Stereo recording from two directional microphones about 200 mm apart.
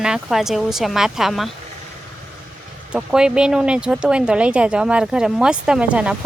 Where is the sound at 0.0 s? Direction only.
5° right (ahead or behind).